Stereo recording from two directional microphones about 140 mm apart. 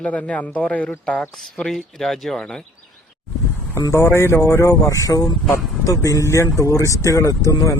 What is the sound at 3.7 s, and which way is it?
A man's voice, 20° left (ahead or behind).